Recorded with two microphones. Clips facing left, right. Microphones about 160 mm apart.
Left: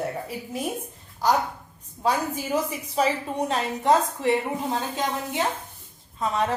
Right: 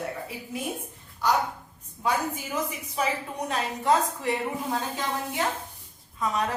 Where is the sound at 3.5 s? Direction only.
25° left (ahead or behind).